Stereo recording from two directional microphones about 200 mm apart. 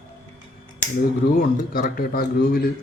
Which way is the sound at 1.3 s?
45° left (ahead or behind).